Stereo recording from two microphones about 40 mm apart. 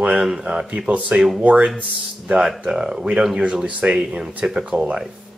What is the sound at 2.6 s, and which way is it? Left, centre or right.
Speech, centre.